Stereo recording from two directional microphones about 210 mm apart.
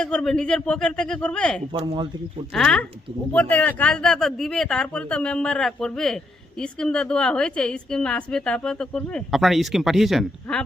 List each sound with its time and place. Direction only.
0.0 s a woman's voice: 5° left (ahead or behind)
1.7 s speech: 25° right (ahead or behind)
2.5 s a woman's voice: 5° left (ahead or behind)